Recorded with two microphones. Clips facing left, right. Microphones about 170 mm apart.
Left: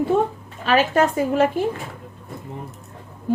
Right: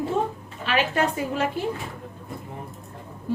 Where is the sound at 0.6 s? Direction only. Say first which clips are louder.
Left 6 dB; 40° left (ahead or behind).